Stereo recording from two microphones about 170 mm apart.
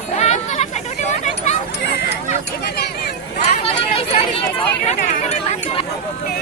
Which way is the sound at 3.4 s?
35° left (ahead or behind).